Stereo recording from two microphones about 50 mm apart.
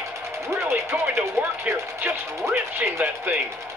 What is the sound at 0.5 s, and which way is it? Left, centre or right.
Speech, right.